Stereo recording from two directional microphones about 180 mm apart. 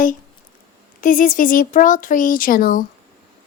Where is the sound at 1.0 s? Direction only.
45° left (ahead or behind).